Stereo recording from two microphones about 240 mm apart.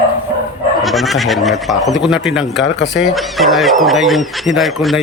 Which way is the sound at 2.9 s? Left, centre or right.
Centre.